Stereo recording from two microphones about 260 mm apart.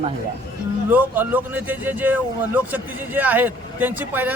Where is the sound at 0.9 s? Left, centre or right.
Centre.